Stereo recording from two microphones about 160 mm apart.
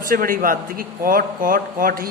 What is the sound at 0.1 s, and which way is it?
Speech, 60° right (ahead or behind).